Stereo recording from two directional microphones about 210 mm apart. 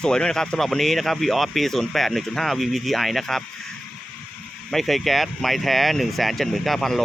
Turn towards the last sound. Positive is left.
turn(degrees=0)  # may be behind; listen again after turning